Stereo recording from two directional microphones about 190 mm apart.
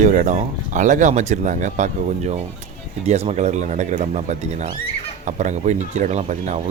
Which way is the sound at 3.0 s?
35° right (ahead or behind).